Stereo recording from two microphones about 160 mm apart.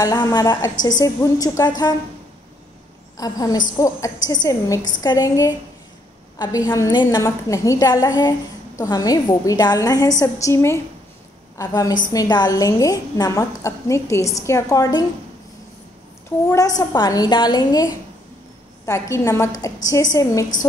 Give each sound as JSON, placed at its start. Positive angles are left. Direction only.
{"t": 0.0, "sound": "a woman's voice", "side_deg": 25}
{"t": 3.2, "sound": "a woman's voice", "side_deg": 20}
{"t": 16.3, "sound": "a woman's voice", "side_deg": 20}